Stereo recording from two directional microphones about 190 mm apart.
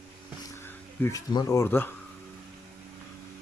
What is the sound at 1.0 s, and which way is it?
Speech, 20° left (ahead or behind).